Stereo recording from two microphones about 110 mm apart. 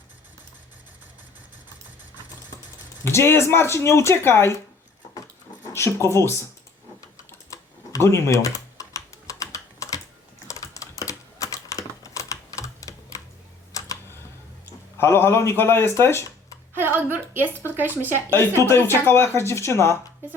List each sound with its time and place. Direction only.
3.0 s speech: 25° left (ahead or behind)
5.7 s speech: 25° left (ahead or behind)
7.3 s typing: 25° left (ahead or behind)
14.9 s speech: 20° left (ahead or behind)
16.7 s a woman's voice: 20° right (ahead or behind)
18.3 s speech: 25° left (ahead or behind)